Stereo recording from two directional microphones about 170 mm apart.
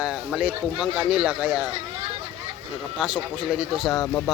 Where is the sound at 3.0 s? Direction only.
5° right (ahead or behind).